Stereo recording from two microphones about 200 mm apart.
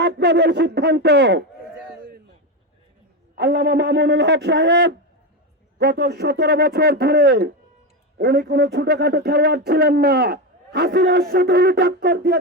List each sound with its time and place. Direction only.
0.0 s speech: 55° right (ahead or behind)
3.3 s speech: 55° right (ahead or behind)